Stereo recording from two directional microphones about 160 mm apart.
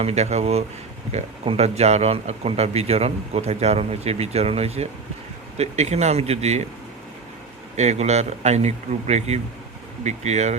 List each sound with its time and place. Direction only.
0.0 s speech: 40° right (ahead or behind)
7.8 s speech: 45° right (ahead or behind)